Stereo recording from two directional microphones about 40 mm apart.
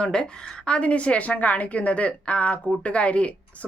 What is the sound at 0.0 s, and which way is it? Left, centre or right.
A woman's voice, left.